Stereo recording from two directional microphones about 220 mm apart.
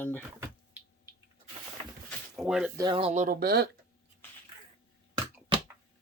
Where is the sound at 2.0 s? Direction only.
Centre (ahead or behind).